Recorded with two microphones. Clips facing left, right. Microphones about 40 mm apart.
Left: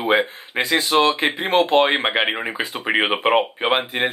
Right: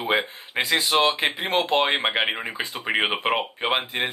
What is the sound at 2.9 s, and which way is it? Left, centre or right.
Speech, centre.